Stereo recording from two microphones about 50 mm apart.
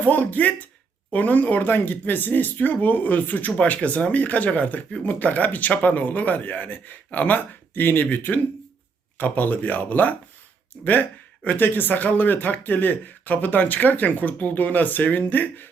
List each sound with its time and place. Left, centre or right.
0.0 s speech: left
11.4 s speech: left